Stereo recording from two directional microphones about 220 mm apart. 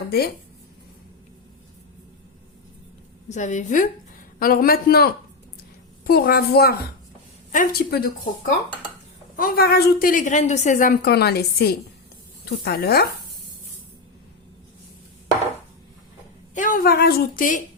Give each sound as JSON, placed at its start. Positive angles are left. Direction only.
{"t": 3.2, "sound": "a woman's voice", "side_deg": 35}
{"t": 9.3, "sound": "a woman's voice", "side_deg": 40}
{"t": 16.6, "sound": "a woman's voice", "side_deg": 40}